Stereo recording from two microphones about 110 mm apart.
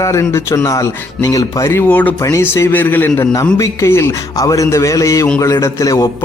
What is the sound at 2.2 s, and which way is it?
Speech, 25° left (ahead or behind).